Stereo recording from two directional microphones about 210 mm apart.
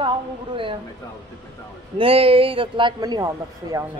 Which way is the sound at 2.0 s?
25° right (ahead or behind).